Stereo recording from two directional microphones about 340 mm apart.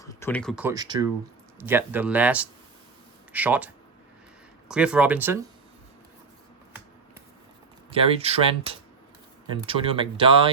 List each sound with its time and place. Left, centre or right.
0.0 s speech: centre
4.7 s speech: centre
7.9 s speech: centre